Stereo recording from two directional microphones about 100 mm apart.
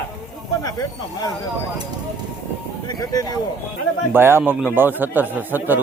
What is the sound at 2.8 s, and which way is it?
Speech, 40° left (ahead or behind).